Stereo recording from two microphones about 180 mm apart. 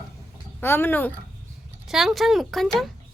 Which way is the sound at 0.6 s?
10° left (ahead or behind).